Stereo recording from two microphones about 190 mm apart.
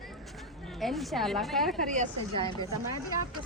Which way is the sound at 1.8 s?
40° right (ahead or behind).